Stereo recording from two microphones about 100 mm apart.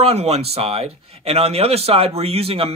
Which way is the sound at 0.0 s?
90° right.